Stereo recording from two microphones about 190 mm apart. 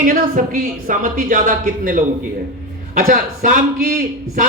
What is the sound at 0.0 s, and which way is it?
Speech, 45° right (ahead or behind).